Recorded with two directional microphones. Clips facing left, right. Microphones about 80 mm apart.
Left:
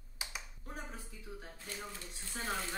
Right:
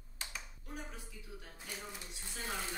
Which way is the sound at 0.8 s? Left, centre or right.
Left.